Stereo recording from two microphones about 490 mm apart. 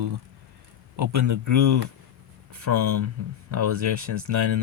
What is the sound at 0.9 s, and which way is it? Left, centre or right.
Speech, right.